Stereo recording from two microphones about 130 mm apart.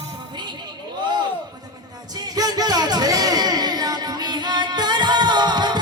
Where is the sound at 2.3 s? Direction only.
30° right (ahead or behind).